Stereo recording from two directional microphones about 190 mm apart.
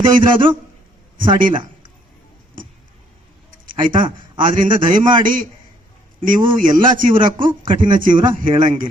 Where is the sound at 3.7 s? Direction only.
45° right (ahead or behind).